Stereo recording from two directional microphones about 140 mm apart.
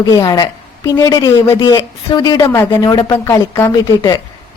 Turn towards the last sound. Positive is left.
turn(degrees=30)  # may be behind; listen again after turning